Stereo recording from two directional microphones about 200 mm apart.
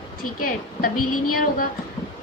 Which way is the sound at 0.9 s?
90° left.